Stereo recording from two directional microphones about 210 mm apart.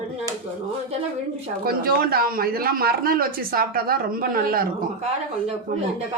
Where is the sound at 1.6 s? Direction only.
45° right (ahead or behind).